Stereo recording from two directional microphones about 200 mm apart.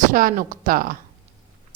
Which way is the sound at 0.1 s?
45° right (ahead or behind).